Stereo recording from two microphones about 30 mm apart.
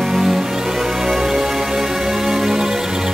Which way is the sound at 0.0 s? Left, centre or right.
Centre.